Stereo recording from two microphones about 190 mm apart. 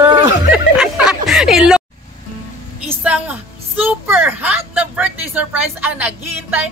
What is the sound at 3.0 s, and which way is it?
A woman's voice, 10° right (ahead or behind).